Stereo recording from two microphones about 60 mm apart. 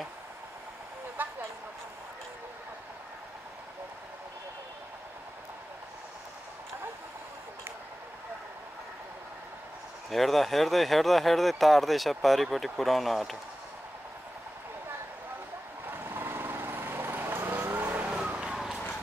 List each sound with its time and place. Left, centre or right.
1.2 s a sound: right
10.0 s speech: centre
15.9 s vehicle: right
17.9 s vehicle: centre